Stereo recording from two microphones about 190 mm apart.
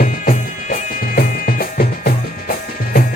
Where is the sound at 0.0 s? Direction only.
45° left (ahead or behind).